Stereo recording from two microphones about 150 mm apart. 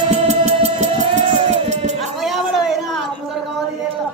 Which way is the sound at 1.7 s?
50° right (ahead or behind).